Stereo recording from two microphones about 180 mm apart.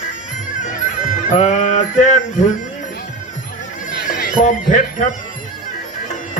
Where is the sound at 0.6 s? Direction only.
40° left (ahead or behind).